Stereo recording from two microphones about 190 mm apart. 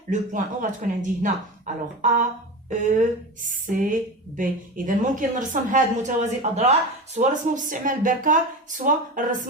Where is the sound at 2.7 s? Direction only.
40° right (ahead or behind).